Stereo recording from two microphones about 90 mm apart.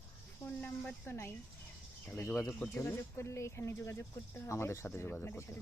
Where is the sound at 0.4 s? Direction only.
20° left (ahead or behind).